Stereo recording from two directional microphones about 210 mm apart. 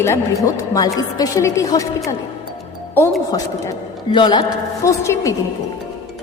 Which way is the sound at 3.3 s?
15° left (ahead or behind).